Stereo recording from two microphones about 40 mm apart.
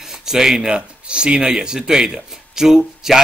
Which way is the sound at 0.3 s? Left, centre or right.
Centre.